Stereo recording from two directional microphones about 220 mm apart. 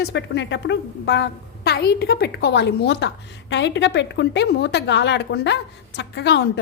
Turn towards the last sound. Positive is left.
turn(degrees=50)  # may be behind; listen again after turning